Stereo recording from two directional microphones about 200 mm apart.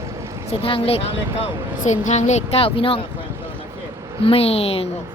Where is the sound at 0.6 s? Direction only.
30° left (ahead or behind).